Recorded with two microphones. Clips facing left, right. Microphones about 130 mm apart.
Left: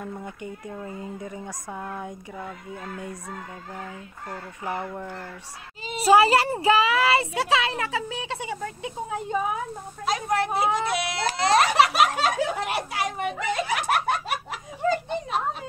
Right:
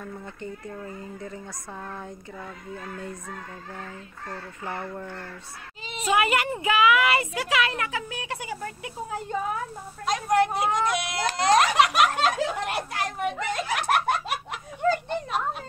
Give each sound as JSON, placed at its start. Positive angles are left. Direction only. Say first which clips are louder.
{"t": 0.0, "sound": "speech", "louder": "left 2 dB", "side_deg": 15}
{"t": 5.9, "sound": "a child's voice", "louder": "left 6 dB", "side_deg": 35}
{"t": 10.0, "sound": "a child's voice", "louder": "right 2 dB", "side_deg": 0}